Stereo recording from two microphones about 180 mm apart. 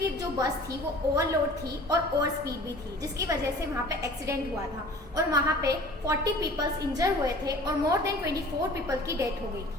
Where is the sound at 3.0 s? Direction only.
20° right (ahead or behind).